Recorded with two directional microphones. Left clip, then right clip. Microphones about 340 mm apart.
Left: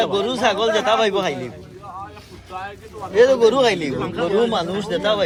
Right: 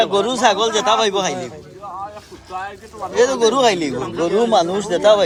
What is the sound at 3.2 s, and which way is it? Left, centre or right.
Speech, centre.